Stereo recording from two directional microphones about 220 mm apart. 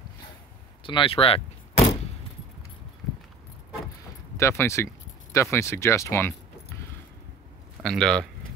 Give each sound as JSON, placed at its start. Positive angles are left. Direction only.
{"t": 0.8, "sound": "door", "side_deg": 25}
{"t": 4.4, "sound": "speech", "side_deg": 10}
{"t": 7.8, "sound": "speech", "side_deg": 5}